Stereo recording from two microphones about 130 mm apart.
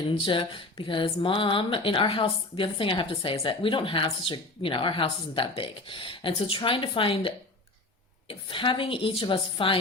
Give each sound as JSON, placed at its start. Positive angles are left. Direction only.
{"t": 0.1, "sound": "a woman's voice", "side_deg": 40}